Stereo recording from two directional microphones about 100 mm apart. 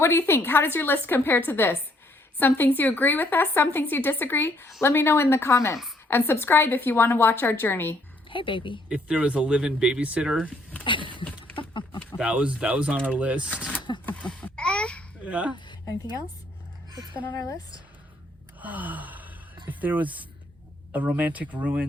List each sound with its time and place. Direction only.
0.0 s speech: 25° left (ahead or behind)
8.3 s a woman's voice: 55° left (ahead or behind)
8.9 s speech: 10° right (ahead or behind)
10.8 s a sound: 55° left (ahead or behind)
12.1 s speech: 10° right (ahead or behind)
14.0 s a sound: 15° left (ahead or behind)
15.2 s speech: 15° right (ahead or behind)
15.5 s speech: 45° left (ahead or behind)
17.3 s speech: 35° left (ahead or behind)
18.6 s gasp: 15° right (ahead or behind)
19.8 s speech: 15° right (ahead or behind)